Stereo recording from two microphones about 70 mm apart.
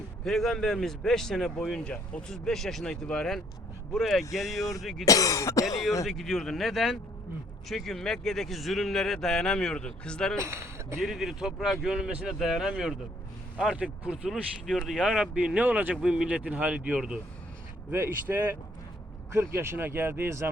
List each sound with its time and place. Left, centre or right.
0.3 s a man's voice: centre
2.3 s speech: centre
5.0 s cough: left
6.1 s speech: centre
10.4 s speech: right
11.0 s a man's voice: centre
15.0 s speech: centre
16.0 s a man's voice: centre
17.9 s speech: right
19.3 s speech: right